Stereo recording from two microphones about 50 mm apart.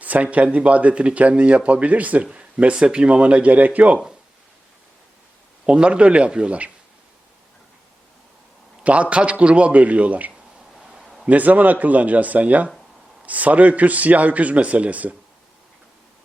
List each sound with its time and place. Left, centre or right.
0.0 s speech: right
5.6 s speech: centre
8.8 s speech: right
10.8 s a sound: centre
11.3 s a man's voice: right